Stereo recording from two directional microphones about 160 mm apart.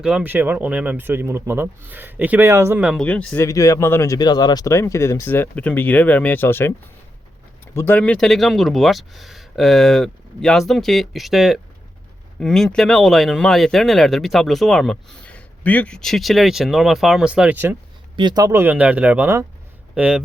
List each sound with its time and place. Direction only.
0.0 s speech: 5° right (ahead or behind)
3.0 s speech: 5° left (ahead or behind)
3.4 s speech: 20° left (ahead or behind)
7.8 s speech: 10° left (ahead or behind); by 17.7 s 10° right (ahead or behind)
18.2 s speech: 25° right (ahead or behind); by 20.2 s 5° right (ahead or behind)